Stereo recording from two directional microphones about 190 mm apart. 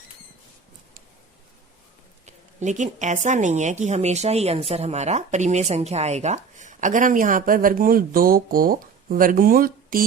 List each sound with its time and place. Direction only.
2.2 s speech: 40° right (ahead or behind)